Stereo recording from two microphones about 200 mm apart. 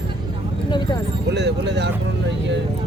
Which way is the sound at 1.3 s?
60° right (ahead or behind).